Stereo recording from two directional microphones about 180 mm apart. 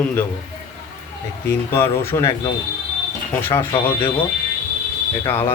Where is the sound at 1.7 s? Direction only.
15° left (ahead or behind).